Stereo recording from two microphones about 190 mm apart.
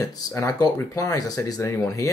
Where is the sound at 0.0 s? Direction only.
15° left (ahead or behind).